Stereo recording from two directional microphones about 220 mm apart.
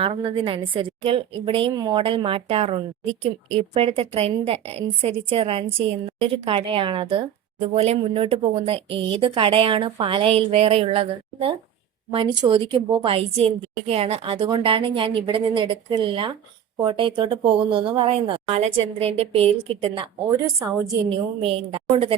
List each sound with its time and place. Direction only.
0.0 s a woman's voice: 25° right (ahead or behind)
21.1 s a woman's voice: 25° right (ahead or behind)